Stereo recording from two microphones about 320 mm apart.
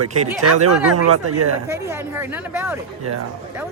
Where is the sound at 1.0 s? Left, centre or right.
Right.